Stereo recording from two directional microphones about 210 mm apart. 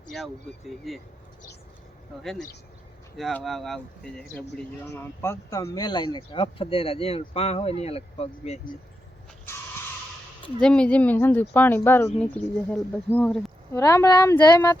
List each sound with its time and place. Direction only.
0.1 s speech: centre (ahead or behind)
2.1 s speech: 5° left (ahead or behind); by 8.7 s 30° left (ahead or behind)
10.6 s speech: 5° left (ahead or behind)